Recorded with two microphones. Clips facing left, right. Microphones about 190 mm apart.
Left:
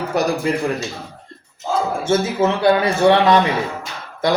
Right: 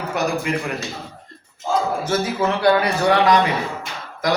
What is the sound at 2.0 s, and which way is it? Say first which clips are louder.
A man's voice: left 3 dB; 25° left (ahead or behind).